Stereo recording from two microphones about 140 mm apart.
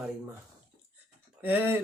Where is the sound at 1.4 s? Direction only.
15° right (ahead or behind).